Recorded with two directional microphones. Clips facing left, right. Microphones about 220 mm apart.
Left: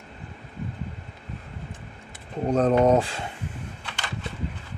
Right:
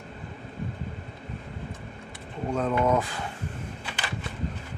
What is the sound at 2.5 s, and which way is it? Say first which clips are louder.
Speech: left 6 dB; 40° left (ahead or behind).